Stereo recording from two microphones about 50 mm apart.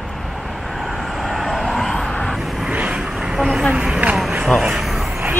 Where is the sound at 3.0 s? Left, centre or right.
Centre.